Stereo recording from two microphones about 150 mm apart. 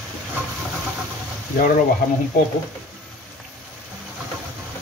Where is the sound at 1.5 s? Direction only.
65° left (ahead or behind).